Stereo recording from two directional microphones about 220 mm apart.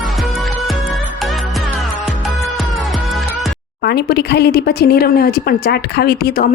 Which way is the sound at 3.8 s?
45° left (ahead or behind).